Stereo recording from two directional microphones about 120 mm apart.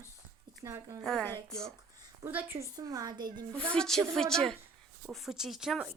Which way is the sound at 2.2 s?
15° right (ahead or behind).